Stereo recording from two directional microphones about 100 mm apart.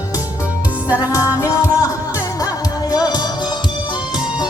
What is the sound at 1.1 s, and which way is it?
Music, 30° left (ahead or behind).